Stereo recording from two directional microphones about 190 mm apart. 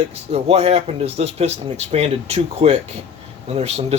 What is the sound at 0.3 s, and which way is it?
Speech, 35° right (ahead or behind).